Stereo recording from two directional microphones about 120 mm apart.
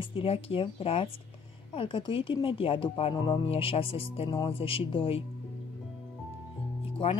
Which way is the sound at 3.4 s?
50° left (ahead or behind).